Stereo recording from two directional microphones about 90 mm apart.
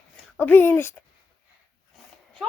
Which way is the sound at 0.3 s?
25° left (ahead or behind).